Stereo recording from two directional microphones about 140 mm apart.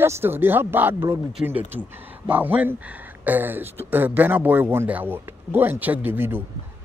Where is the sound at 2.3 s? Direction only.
10° right (ahead or behind).